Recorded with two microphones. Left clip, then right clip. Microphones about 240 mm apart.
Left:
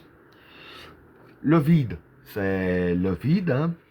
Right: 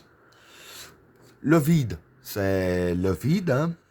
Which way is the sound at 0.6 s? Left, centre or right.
Right.